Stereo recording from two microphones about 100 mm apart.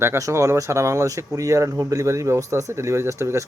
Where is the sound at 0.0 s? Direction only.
30° right (ahead or behind).